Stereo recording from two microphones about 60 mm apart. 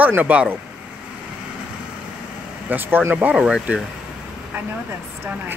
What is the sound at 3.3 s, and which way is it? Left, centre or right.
Speech, centre.